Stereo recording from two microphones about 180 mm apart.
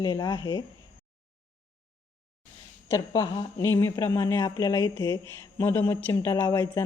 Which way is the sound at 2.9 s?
20° left (ahead or behind).